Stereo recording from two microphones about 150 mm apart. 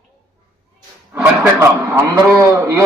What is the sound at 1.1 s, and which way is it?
A man's voice, 15° right (ahead or behind).